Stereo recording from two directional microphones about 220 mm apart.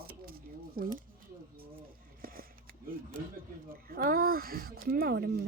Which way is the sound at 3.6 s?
40° right (ahead or behind).